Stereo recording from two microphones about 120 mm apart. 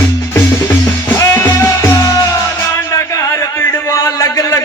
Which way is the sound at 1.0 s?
20° left (ahead or behind).